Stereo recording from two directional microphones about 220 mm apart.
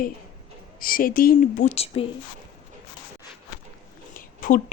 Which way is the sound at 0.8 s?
40° left (ahead or behind).